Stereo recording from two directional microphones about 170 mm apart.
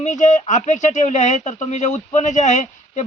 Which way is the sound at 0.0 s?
45° left (ahead or behind).